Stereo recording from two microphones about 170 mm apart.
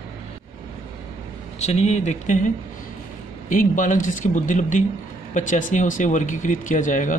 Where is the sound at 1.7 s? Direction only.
40° left (ahead or behind).